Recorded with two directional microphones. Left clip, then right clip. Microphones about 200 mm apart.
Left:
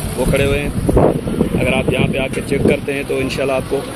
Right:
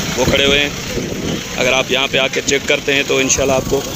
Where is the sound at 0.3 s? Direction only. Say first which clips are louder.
Right 4 dB; 5° left (ahead or behind).